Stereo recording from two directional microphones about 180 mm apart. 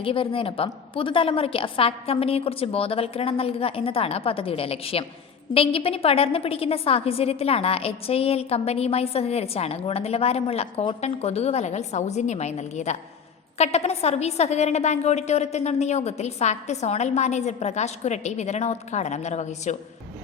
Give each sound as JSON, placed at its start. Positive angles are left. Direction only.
{"t": 0.0, "sound": "a woman's voice", "side_deg": 30}